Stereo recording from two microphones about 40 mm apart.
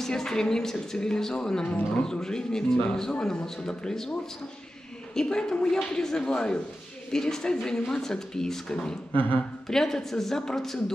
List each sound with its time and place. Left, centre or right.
0.0 s a woman's voice: centre
9.1 s speech: left
9.7 s speech: centre